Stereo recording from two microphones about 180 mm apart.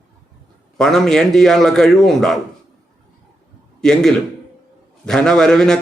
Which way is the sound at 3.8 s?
5° left (ahead or behind).